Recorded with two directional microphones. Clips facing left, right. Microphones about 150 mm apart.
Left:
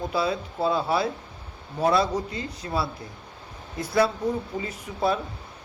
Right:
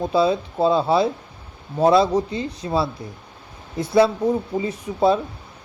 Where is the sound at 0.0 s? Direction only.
25° right (ahead or behind).